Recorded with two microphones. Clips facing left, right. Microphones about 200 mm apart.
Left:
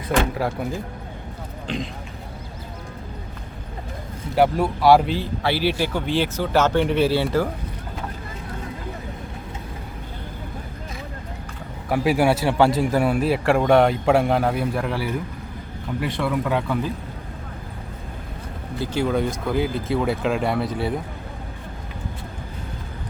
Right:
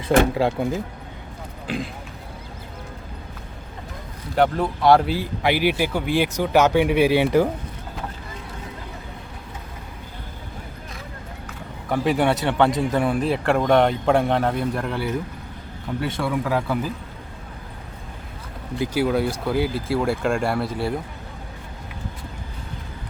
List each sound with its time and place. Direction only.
0.3 s speech: 25° right (ahead or behind)
1.6 s speech: 5° right (ahead or behind)
4.4 s speech: 5° left (ahead or behind)
5.1 s speech: 15° right (ahead or behind)
11.9 s speech: 5° left (ahead or behind)
18.8 s speech: 5° right (ahead or behind)